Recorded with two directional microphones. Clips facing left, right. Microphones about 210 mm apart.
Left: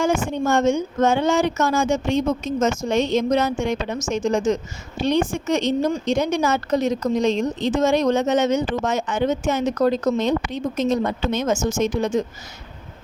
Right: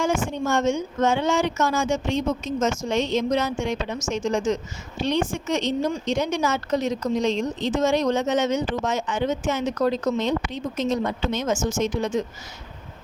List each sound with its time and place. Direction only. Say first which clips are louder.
0.0 s a woman's voice: left 3 dB; 60° left (ahead or behind)